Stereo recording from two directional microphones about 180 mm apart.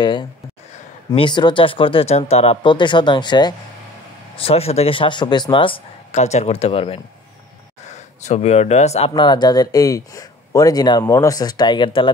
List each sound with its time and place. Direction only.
0.0 s speech: 25° left (ahead or behind)
8.3 s speech: 35° left (ahead or behind)